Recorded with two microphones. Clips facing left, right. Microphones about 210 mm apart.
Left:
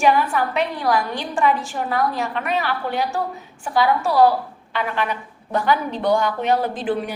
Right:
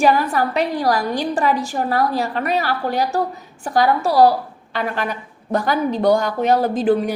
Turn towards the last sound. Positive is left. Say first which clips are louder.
# right 6 dB
turn(degrees=-40)  # may be behind; listen again after turning